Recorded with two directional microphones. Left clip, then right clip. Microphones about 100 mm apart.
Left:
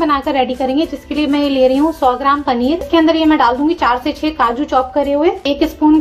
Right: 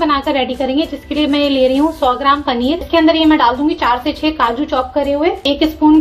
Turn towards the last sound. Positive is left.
turn(degrees=45)  # may be behind; listen again after turning